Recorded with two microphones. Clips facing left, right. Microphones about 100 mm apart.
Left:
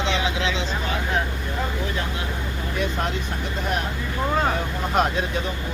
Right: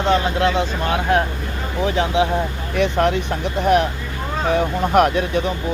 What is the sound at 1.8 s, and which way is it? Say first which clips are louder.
Speech: right 10 dB; 80° right.